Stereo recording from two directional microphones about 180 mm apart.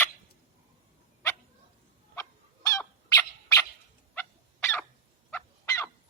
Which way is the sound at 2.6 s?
15° left (ahead or behind).